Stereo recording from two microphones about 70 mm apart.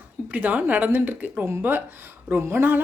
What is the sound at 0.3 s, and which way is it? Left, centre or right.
A woman's voice, right.